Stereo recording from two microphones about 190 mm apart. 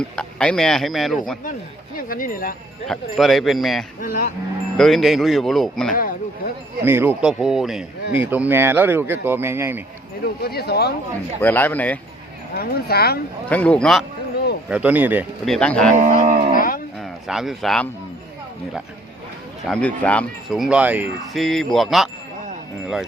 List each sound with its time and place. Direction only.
0.0 s speech: 5° left (ahead or behind)
2.0 s speech: 45° left (ahead or behind)
3.2 s speech: centre (ahead or behind)
5.9 s speech: 45° left (ahead or behind)
6.8 s speech: 10° right (ahead or behind)
10.4 s speech: 55° left (ahead or behind)
11.3 s speech: 10° left (ahead or behind)
12.5 s speech: 55° left (ahead or behind)
13.5 s speech: 5° left (ahead or behind)
14.7 s speech: 10° right (ahead or behind)
15.4 s speech: 5° left (ahead or behind)
16.0 s livestock: 40° right (ahead or behind)
17.0 s speech: centre (ahead or behind)
19.6 s speech: 5° left (ahead or behind)